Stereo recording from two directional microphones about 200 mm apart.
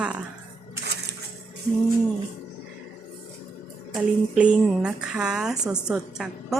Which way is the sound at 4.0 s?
Centre (ahead or behind).